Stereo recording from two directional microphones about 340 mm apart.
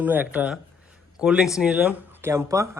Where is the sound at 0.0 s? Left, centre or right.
Centre.